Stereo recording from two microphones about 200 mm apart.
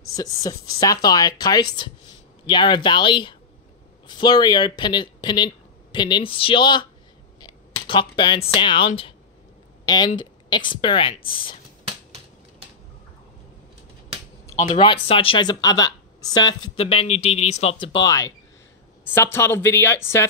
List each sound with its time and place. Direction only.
0.1 s speech: 15° left (ahead or behind)
14.8 s speech: 25° left (ahead or behind)